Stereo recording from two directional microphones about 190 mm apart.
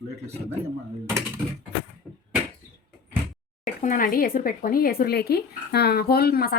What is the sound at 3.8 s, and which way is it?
Speech, 45° left (ahead or behind).